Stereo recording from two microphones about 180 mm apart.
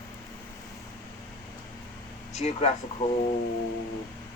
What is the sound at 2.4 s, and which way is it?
Speech, 35° left (ahead or behind).